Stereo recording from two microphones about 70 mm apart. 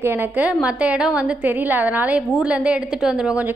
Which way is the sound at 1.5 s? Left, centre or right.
Right.